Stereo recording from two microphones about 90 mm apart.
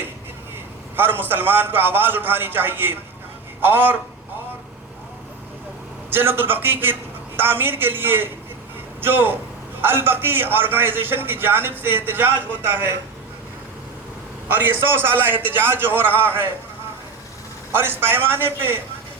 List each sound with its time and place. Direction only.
0.9 s a man's voice: 25° right (ahead or behind)
6.1 s a man's voice: 25° right (ahead or behind)
14.4 s a man's voice: 25° right (ahead or behind)
17.7 s a man's voice: 25° right (ahead or behind)